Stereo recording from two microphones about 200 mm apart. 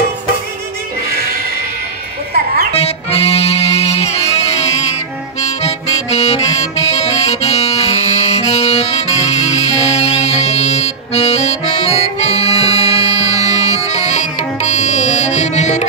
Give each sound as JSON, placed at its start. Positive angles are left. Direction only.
{"t": 2.3, "sound": "music", "side_deg": -50}
{"t": 2.7, "sound": "music", "side_deg": 30}